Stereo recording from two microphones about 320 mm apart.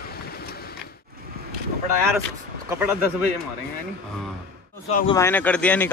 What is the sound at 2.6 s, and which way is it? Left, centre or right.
Speech, centre.